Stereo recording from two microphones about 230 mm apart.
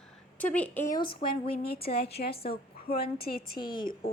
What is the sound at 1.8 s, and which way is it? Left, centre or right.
A woman's voice, left.